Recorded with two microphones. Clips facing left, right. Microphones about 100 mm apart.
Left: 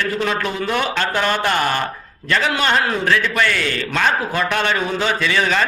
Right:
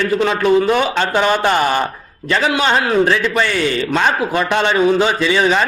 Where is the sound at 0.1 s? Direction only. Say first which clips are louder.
Right 8 dB; 25° right (ahead or behind).